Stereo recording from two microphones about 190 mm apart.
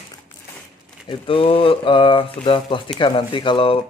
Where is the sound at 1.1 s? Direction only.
30° left (ahead or behind).